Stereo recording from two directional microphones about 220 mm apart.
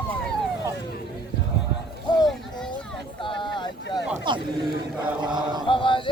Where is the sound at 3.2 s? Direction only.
20° left (ahead or behind).